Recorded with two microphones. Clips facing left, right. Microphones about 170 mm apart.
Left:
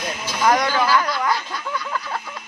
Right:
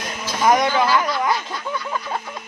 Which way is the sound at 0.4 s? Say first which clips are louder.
Right 2 dB; 20° right (ahead or behind).